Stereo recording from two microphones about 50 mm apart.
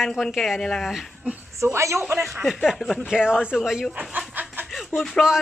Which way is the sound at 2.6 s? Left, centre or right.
Centre.